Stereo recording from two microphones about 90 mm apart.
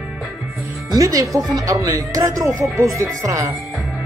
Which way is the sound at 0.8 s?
40° right (ahead or behind).